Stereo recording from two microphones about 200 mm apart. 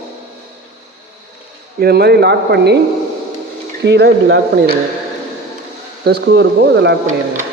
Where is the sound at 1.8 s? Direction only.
50° right (ahead or behind).